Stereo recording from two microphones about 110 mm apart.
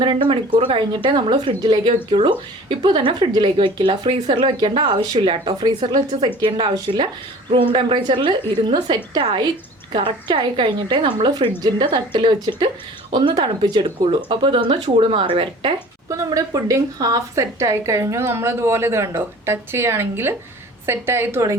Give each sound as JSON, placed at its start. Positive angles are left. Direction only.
{"t": 0.0, "sound": "speech", "side_deg": -50}
{"t": 16.0, "sound": "speech", "side_deg": -30}